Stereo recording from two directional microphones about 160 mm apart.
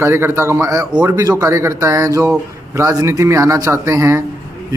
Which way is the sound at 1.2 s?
20° right (ahead or behind).